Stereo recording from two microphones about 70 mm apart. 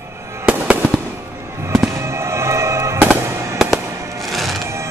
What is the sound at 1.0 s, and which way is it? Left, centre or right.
Fireworks, right.